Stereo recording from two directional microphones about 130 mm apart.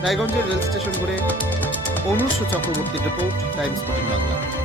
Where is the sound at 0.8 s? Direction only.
15° left (ahead or behind).